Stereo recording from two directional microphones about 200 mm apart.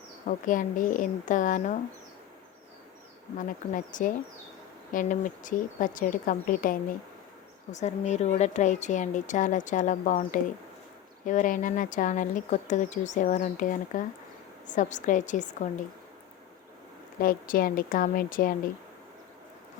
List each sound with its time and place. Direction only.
0.3 s a woman's voice: 40° left (ahead or behind)
3.3 s a woman's voice: 40° left (ahead or behind)
17.2 s a woman's voice: 45° left (ahead or behind)